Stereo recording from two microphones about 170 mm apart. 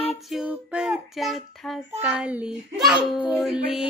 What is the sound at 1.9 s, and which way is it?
A child's voice, 10° right (ahead or behind).